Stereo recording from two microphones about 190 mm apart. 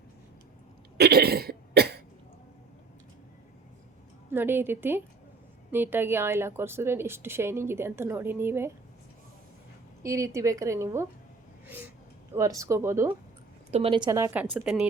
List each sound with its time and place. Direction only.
0.9 s cough: 60° right (ahead or behind)
4.3 s speech: 10° right (ahead or behind)
10.0 s speech: 15° right (ahead or behind)
12.3 s speech: 15° right (ahead or behind)
13.7 s a woman's voice: 30° right (ahead or behind); by 14.8 s 5° right (ahead or behind)